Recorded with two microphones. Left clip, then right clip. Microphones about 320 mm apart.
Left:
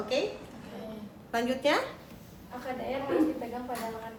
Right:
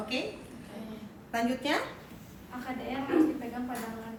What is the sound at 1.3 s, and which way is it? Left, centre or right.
Speech, centre.